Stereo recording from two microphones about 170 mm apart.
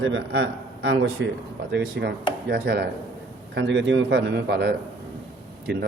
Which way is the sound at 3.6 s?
90° right.